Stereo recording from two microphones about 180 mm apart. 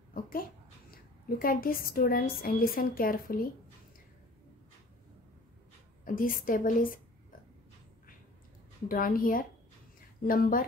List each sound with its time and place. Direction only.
0.1 s a sound: 50° left (ahead or behind)
0.9 s a woman's voice: 55° left (ahead or behind)
6.0 s a woman's voice: 50° left (ahead or behind)
8.8 s a woman's voice: 50° left (ahead or behind)